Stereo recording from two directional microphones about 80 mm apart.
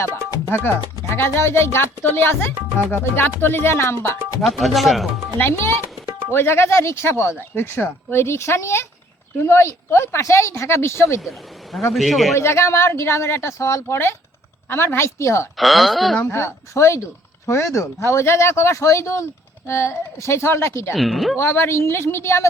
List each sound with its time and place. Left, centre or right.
0.4 s speech: left
4.4 s speech: centre
5.4 s speech: left
11.2 s speech: centre
12.3 s speech: left
15.5 s speech: centre
16.2 s speech: left
20.9 s speech: centre
21.3 s speech: left